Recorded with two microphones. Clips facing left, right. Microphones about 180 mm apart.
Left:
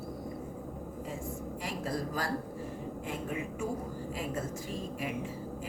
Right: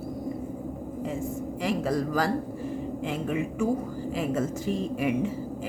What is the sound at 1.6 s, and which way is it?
A woman's voice, 90° right.